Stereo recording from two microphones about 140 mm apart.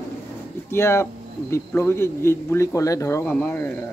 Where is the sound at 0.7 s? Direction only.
20° left (ahead or behind).